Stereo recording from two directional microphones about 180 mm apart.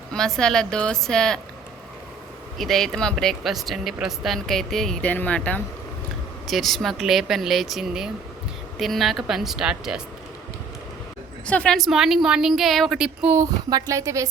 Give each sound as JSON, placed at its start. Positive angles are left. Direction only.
{"t": 0.1, "sound": "speech", "side_deg": 5}
{"t": 2.6, "sound": "speech", "side_deg": 0}
{"t": 11.4, "sound": "speech", "side_deg": 5}
{"t": 13.3, "sound": "speech", "side_deg": -20}